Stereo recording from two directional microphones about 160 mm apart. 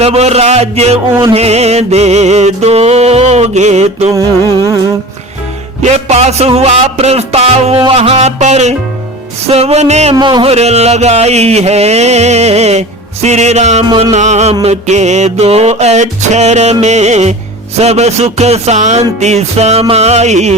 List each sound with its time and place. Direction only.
0.0 s music: 40° right (ahead or behind)
4.1 s music: 20° right (ahead or behind)
5.8 s music: 45° right (ahead or behind)
10.2 s a sound: 30° right (ahead or behind); by 20.6 s 45° right (ahead or behind)